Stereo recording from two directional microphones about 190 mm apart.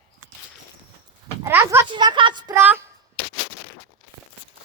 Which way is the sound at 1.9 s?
25° right (ahead or behind).